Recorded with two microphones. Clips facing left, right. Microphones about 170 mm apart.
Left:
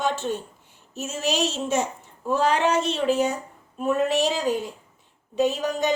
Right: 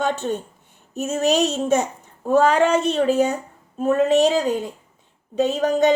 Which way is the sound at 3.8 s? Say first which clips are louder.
Right 6 dB; 50° right (ahead or behind).